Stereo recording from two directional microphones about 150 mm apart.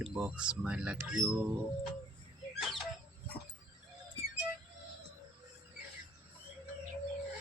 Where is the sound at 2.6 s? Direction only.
Centre (ahead or behind).